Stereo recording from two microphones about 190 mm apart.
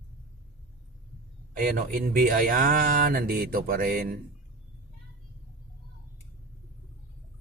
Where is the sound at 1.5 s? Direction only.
50° right (ahead or behind).